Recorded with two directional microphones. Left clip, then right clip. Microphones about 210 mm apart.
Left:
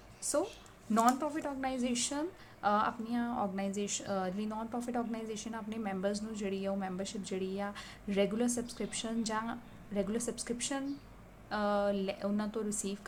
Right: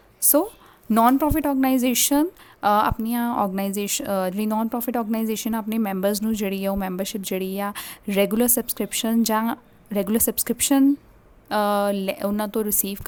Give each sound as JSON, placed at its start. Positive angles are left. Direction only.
{"t": 0.2, "sound": "a woman's voice", "side_deg": -55}